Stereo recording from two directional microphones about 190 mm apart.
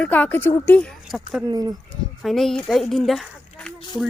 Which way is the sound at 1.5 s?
20° right (ahead or behind).